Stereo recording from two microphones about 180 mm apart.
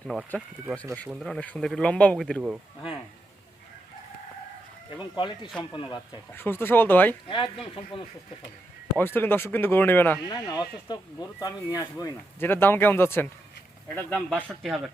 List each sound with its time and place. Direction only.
0.9 s speech: centre (ahead or behind)
5.1 s speech: 25° left (ahead or behind)
6.3 s speech: 10° left (ahead or behind)
7.3 s speech: 25° left (ahead or behind)
9.0 s speech: 10° left (ahead or behind)
10.2 s speech: 25° left (ahead or behind)
14.3 s speech: 5° right (ahead or behind)